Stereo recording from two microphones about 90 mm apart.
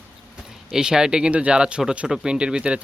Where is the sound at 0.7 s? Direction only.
5° right (ahead or behind).